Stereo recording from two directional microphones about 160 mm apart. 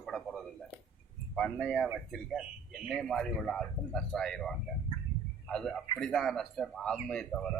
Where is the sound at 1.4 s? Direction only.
5° left (ahead or behind).